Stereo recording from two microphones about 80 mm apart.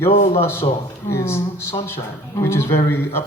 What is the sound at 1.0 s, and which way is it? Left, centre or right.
A man's voice, left.